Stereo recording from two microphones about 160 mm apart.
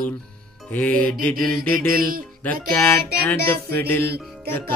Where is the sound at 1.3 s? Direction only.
65° right (ahead or behind).